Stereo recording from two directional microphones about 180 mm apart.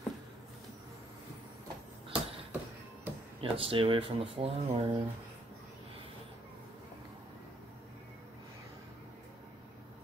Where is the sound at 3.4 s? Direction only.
30° right (ahead or behind).